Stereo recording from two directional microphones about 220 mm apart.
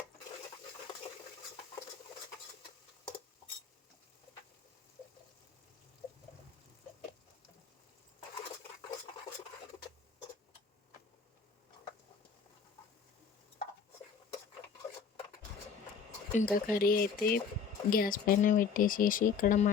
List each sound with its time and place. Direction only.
16.3 s speech: 35° left (ahead or behind)